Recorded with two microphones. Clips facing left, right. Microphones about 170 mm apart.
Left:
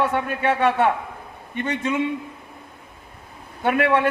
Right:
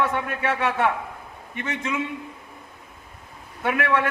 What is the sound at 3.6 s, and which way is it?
Speech, 30° left (ahead or behind).